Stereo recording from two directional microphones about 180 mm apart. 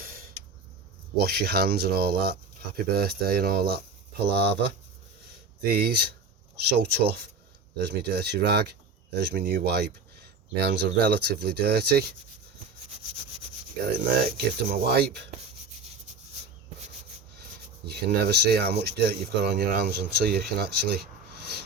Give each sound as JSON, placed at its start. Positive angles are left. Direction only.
{"t": 0.0, "sound": "a sound", "side_deg": -55}
{"t": 1.2, "sound": "speech", "side_deg": -60}
{"t": 4.2, "sound": "speech", "side_deg": -70}
{"t": 5.6, "sound": "speech", "side_deg": -60}
{"t": 13.9, "sound": "speech", "side_deg": -60}
{"t": 17.8, "sound": "speech", "side_deg": -65}